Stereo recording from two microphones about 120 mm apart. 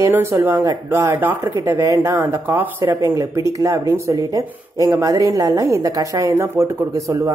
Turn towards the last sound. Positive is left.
turn(degrees=-25)  # may be behind; listen again after turning